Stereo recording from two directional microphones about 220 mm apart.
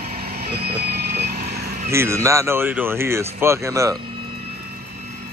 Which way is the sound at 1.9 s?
10° right (ahead or behind).